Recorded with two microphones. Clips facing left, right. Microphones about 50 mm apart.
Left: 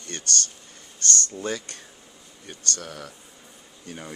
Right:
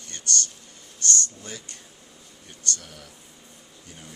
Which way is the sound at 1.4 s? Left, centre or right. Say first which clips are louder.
Left 10 dB; left.